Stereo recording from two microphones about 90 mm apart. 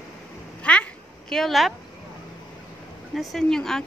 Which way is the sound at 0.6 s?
15° left (ahead or behind).